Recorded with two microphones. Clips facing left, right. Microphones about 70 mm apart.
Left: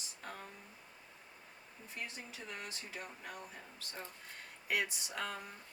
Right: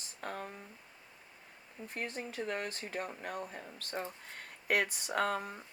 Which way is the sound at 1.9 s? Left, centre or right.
Right.